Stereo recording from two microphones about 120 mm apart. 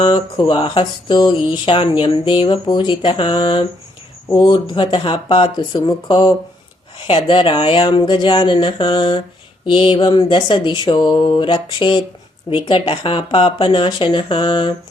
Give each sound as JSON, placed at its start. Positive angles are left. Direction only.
{"t": 0.0, "sound": "speech", "side_deg": 40}